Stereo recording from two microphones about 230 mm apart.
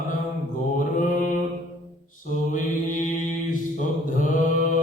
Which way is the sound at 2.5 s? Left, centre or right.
Left.